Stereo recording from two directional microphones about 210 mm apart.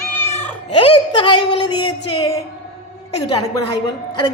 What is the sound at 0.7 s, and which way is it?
Speech, 25° left (ahead or behind).